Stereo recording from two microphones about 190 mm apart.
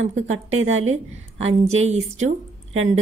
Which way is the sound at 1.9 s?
40° right (ahead or behind).